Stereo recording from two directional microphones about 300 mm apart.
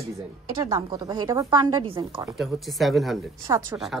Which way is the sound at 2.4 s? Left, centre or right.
Centre.